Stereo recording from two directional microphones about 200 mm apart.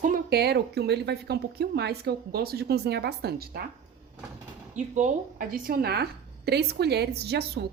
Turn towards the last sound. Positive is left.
turn(degrees=-55)  # may be behind; listen again after turning